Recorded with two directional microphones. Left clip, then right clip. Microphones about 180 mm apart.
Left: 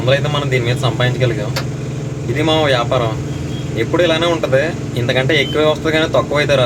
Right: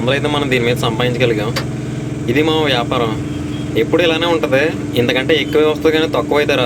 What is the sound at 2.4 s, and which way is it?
Speech, 30° right (ahead or behind).